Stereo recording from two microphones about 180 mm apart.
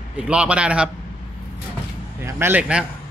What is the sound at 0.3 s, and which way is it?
Speech, 5° right (ahead or behind).